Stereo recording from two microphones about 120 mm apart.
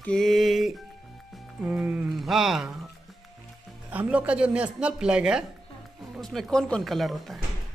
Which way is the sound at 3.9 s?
10° right (ahead or behind).